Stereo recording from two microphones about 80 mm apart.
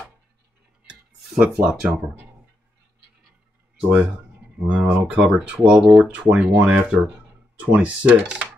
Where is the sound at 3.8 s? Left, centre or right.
Right.